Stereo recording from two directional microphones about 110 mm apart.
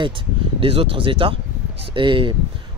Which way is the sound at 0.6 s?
55° right (ahead or behind).